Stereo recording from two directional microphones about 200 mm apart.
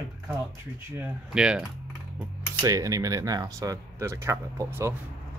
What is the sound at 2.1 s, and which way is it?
Speech, 15° right (ahead or behind).